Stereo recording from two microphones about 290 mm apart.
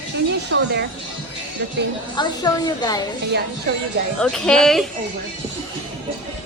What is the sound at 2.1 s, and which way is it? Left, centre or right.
Speech, centre.